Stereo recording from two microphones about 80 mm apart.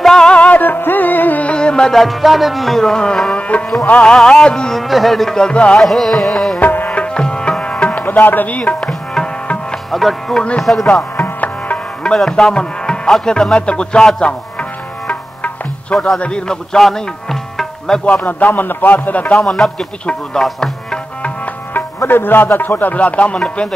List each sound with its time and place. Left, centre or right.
0.0 s music: centre
5.8 s music: centre
6.6 s music: left; by 10.9 s centre
11.1 s music: left
18.2 s speech: left
19.4 s music: centre
21.7 s speech: left